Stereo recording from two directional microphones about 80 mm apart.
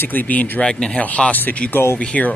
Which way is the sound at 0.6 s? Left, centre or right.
Centre.